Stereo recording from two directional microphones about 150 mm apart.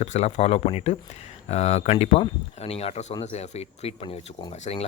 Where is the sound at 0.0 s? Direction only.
45° left (ahead or behind).